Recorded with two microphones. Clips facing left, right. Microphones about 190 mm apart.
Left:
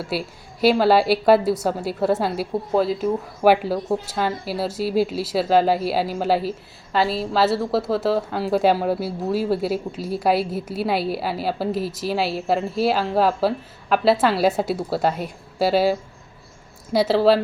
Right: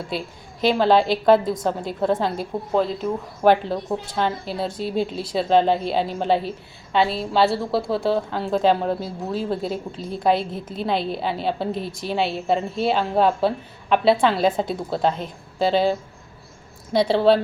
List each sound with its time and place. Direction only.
0.1 s a woman's voice: 5° left (ahead or behind)